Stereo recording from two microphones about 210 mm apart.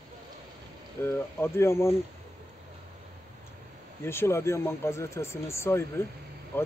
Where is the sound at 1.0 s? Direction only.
10° left (ahead or behind).